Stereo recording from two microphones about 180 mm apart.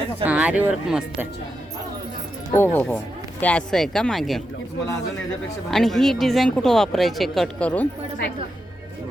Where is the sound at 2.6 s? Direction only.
10° left (ahead or behind).